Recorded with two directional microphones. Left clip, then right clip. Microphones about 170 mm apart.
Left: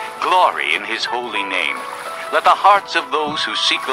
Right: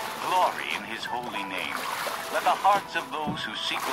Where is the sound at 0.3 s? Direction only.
45° left (ahead or behind).